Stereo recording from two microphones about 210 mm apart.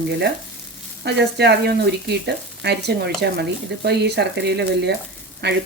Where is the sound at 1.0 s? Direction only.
55° right (ahead or behind).